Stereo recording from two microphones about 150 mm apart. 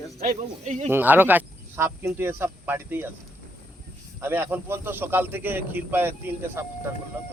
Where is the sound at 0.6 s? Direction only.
50° right (ahead or behind).